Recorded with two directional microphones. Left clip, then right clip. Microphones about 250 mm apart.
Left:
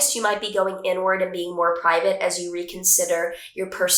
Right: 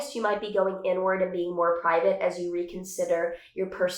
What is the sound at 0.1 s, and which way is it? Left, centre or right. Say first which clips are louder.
Speech: left 4 dB; centre.